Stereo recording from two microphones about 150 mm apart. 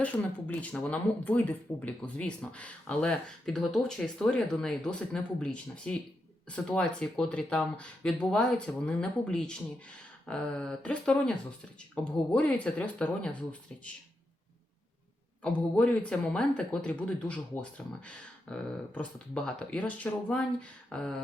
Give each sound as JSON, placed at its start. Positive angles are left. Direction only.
{"t": 0.0, "sound": "speech", "side_deg": 10}
{"t": 15.4, "sound": "speech", "side_deg": 10}